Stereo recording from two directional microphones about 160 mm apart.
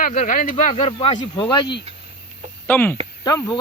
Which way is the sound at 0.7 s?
40° left (ahead or behind).